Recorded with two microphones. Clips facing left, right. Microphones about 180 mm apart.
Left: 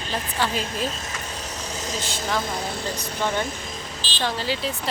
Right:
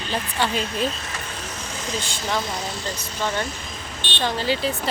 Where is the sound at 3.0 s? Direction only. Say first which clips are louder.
Left 1 dB; 15° left (ahead or behind).